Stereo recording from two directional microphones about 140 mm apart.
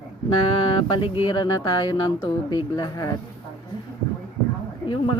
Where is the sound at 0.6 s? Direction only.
40° left (ahead or behind).